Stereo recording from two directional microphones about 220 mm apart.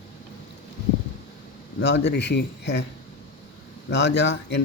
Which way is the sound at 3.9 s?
50° left (ahead or behind).